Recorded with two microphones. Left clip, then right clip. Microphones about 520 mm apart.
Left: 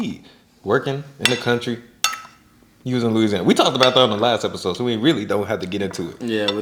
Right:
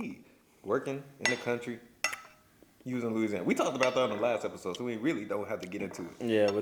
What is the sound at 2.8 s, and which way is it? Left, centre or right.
A man's voice, left.